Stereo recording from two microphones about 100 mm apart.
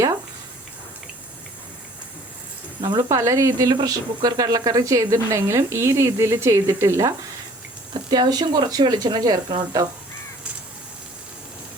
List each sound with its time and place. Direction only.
2.8 s speech: 50° right (ahead or behind)
3.1 s speech: 30° right (ahead or behind)
8.1 s speech: 45° right (ahead or behind)